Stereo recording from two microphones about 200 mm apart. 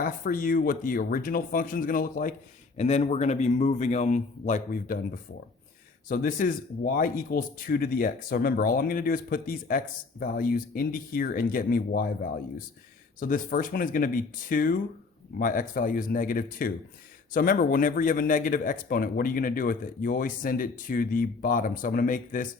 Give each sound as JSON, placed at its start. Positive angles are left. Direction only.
{"t": 0.0, "sound": "speech", "side_deg": 45}
{"t": 2.7, "sound": "a man's voice", "side_deg": 35}
{"t": 6.1, "sound": "speech", "side_deg": 45}